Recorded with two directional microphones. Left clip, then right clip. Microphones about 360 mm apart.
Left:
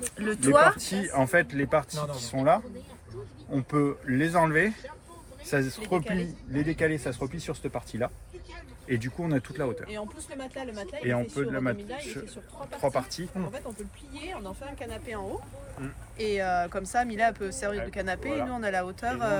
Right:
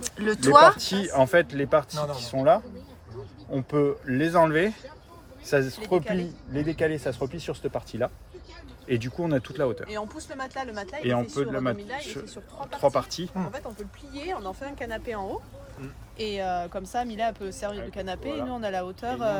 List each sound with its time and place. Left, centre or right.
0.2 s speech: centre
0.8 s speech: right
10.6 s speech: right
11.0 s speech: centre
16.1 s speech: centre